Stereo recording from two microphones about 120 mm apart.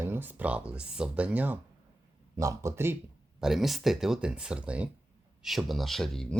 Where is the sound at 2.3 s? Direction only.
25° right (ahead or behind).